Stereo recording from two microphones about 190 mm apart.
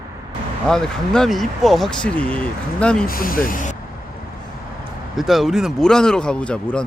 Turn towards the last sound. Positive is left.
turn(degrees=5)  # may be behind; listen again after turning